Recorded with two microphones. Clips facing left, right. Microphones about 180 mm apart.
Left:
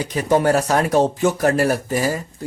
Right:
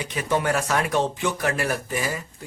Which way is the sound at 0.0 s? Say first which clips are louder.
Left 7 dB; 40° left (ahead or behind).